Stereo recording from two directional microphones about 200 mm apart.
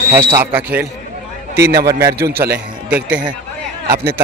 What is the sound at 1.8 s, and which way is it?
Speech, 15° right (ahead or behind).